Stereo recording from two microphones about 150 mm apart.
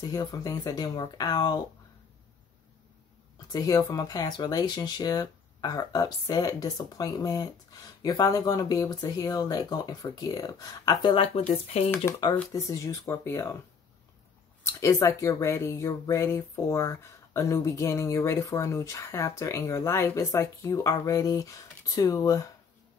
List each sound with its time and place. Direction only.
0.0 s speech: 25° left (ahead or behind)
3.5 s speech: 25° left (ahead or behind)
11.6 s speech: 45° left (ahead or behind)
12.5 s speech: 20° left (ahead or behind)
14.7 s speech: 20° left (ahead or behind)